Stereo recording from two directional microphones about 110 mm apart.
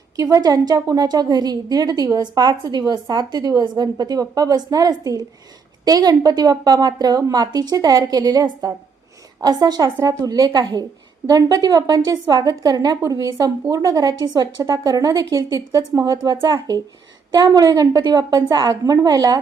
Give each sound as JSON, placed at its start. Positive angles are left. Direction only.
{"t": 0.2, "sound": "a woman's voice", "side_deg": -30}
{"t": 10.5, "sound": "a woman's voice", "side_deg": -45}
{"t": 11.3, "sound": "a woman's voice", "side_deg": -35}